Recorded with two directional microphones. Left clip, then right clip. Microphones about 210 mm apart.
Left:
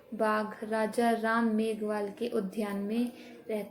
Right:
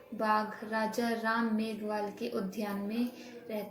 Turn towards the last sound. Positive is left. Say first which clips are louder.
# left 3 dB
turn(degrees=45)  # may be behind; listen again after turning